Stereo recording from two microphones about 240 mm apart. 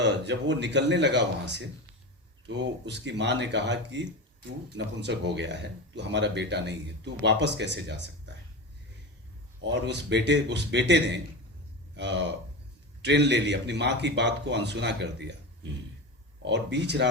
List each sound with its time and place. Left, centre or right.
0.0 s speech: right
9.6 s speech: right
16.4 s speech: right